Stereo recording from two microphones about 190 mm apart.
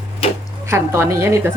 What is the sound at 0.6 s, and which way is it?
Speech, 15° right (ahead or behind).